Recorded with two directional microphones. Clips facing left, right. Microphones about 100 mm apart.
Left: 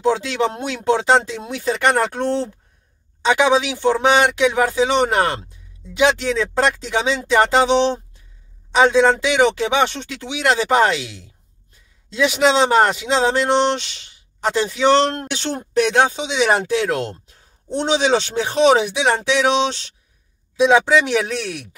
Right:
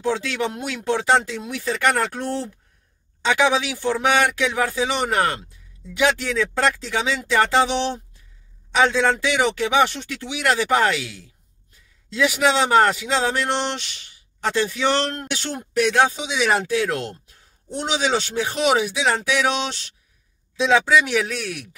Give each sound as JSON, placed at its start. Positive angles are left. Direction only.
{"t": 0.0, "sound": "speech", "side_deg": 25}